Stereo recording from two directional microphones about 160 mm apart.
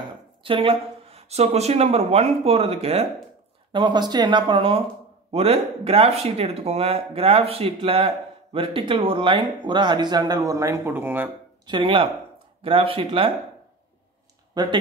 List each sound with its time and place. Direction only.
0.4 s speech: 35° right (ahead or behind)
3.7 s speech: 30° right (ahead or behind)
11.6 s speech: 30° right (ahead or behind)
14.5 s speech: 25° right (ahead or behind)